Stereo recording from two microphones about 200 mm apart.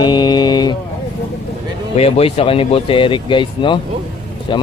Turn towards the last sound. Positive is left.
turn(degrees=25)  # may be behind; listen again after turning